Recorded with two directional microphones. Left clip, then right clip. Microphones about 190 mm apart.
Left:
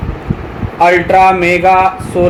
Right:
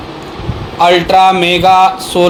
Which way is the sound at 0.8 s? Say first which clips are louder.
Even; 35° right (ahead or behind).